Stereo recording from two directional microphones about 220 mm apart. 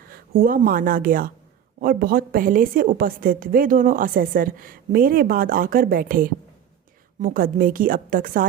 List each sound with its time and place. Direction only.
0.1 s a woman's voice: 40° right (ahead or behind)